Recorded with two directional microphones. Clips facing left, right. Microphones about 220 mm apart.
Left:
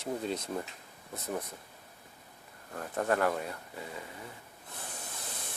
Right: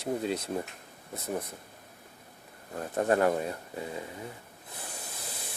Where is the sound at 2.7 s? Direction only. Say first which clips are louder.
Right 4 dB; 25° right (ahead or behind).